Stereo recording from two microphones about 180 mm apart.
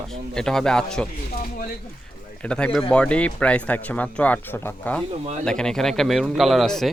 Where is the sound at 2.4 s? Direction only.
5° left (ahead or behind).